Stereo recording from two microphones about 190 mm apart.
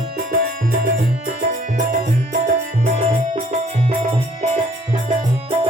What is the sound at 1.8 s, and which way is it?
Music, 45° right (ahead or behind).